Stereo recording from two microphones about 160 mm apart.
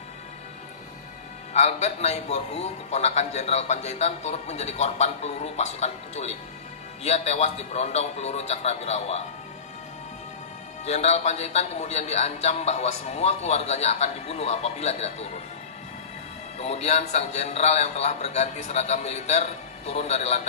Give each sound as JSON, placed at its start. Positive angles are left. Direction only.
{"t": 1.5, "sound": "a man's voice", "side_deg": 45}
{"t": 10.9, "sound": "a man's voice", "side_deg": 40}
{"t": 16.5, "sound": "a man's voice", "side_deg": 40}